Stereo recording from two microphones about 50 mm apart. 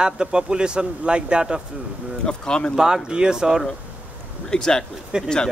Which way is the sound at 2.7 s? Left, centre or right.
Centre.